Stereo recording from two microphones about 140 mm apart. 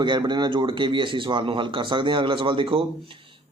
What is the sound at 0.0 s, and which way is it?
A man's voice, 35° right (ahead or behind).